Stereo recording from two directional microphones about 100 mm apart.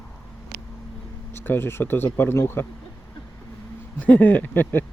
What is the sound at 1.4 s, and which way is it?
Speech, 20° left (ahead or behind).